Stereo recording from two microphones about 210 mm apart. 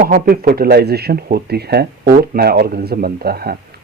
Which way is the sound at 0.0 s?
45° right (ahead or behind).